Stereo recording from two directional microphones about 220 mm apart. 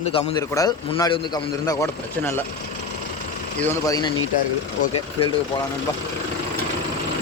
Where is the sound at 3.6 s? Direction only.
15° left (ahead or behind).